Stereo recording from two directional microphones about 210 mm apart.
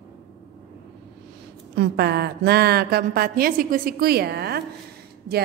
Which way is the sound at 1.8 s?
50° right (ahead or behind).